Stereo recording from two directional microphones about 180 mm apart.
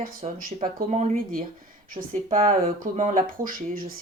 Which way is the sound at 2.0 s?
25° right (ahead or behind).